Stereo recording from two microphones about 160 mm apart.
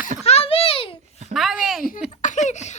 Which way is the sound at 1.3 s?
Centre (ahead or behind).